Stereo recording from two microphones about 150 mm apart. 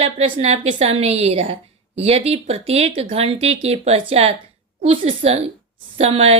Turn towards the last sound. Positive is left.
turn(degrees=-45)  # may be behind; listen again after turning